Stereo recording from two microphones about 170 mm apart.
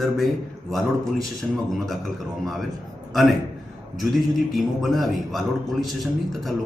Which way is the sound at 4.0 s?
Centre (ahead or behind).